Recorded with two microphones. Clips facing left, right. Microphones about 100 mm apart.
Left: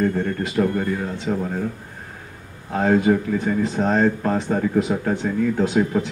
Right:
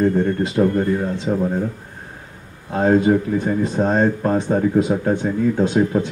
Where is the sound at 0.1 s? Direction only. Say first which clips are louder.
Right 4 dB; 20° right (ahead or behind).